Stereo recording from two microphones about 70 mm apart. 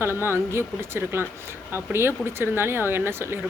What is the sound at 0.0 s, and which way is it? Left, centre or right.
Speech, right.